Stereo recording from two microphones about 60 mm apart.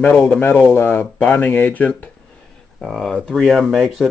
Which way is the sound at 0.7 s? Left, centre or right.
Left.